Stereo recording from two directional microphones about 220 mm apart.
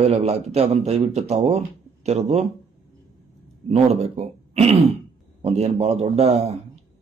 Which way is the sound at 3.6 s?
30° right (ahead or behind).